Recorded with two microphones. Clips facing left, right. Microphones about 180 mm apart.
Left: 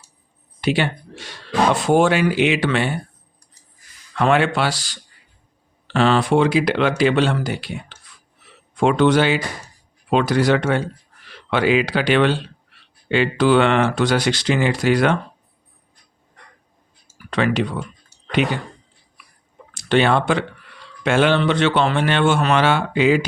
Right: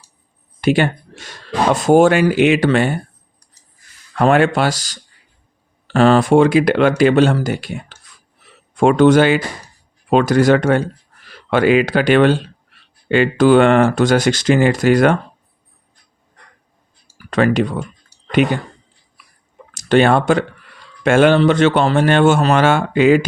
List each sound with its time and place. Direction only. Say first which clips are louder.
0.6 s speech: right 5 dB; 45° right (ahead or behind)
4.1 s speech: right 4 dB; 45° right (ahead or behind)
17.3 s speech: right 5 dB; 45° right (ahead or behind)
19.7 s speech: right 4 dB; 45° right (ahead or behind)